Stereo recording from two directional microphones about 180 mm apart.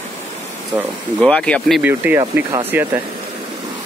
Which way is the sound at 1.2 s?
5° left (ahead or behind).